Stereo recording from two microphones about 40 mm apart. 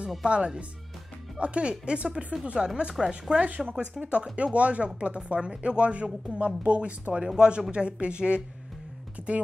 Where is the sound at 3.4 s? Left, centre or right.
Right.